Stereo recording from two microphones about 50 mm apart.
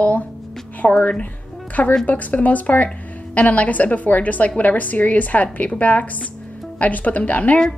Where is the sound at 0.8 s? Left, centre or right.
Left.